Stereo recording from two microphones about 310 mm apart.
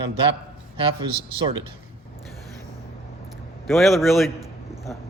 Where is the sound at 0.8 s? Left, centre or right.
Centre.